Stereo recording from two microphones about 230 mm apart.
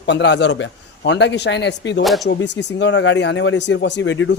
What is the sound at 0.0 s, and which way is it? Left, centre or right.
Speech, left.